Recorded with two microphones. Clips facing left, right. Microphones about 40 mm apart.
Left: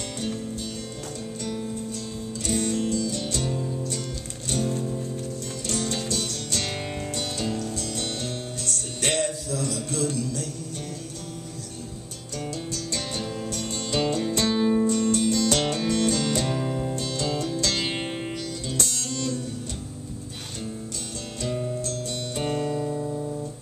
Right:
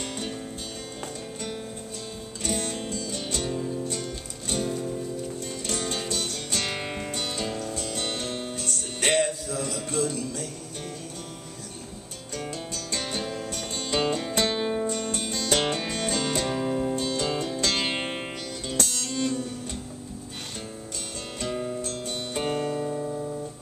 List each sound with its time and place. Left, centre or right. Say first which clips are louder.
2.4 s music: left 4 dB; centre
3.3 s music: left 1 dB; centre
4.0 s music: left 1 dB; right
12.4 s music: left 2 dB; centre
21.4 s music: left 1 dB; centre